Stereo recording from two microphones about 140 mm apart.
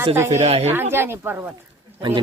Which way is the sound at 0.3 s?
50° right (ahead or behind).